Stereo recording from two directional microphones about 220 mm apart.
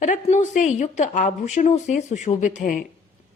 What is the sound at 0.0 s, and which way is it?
A woman's voice, 35° left (ahead or behind).